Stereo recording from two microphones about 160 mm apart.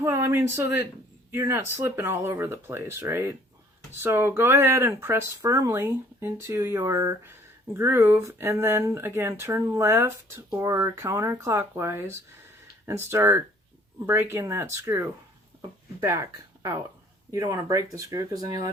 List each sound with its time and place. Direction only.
0.0 s speech: 20° right (ahead or behind)